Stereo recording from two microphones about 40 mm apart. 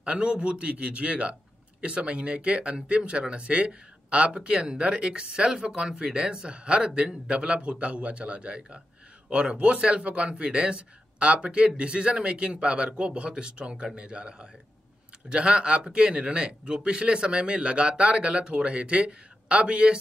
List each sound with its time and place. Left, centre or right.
0.0 s a man's voice: right